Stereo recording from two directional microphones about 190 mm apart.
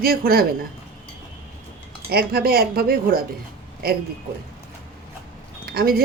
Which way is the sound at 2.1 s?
55° right (ahead or behind).